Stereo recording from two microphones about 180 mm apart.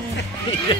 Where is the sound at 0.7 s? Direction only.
25° left (ahead or behind).